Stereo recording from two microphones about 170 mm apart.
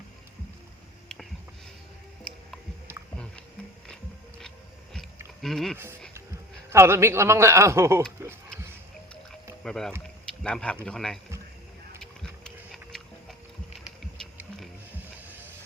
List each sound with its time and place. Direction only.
1.0 s a sound: centre (ahead or behind)
4.9 s a sound: centre (ahead or behind)
6.7 s a man's voice: 15° right (ahead or behind)
9.6 s a man's voice: 5° left (ahead or behind)
12.2 s music: 5° left (ahead or behind)
14.9 s music: 10° right (ahead or behind)